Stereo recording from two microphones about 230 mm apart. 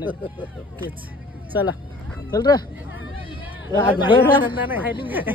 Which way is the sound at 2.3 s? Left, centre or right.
Centre.